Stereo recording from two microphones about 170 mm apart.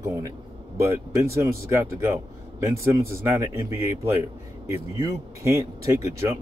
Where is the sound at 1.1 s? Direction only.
15° right (ahead or behind).